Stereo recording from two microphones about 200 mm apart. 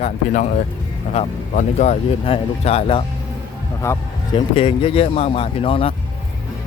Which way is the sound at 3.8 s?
15° left (ahead or behind).